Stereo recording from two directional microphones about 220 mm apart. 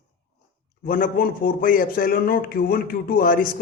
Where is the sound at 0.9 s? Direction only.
40° left (ahead or behind).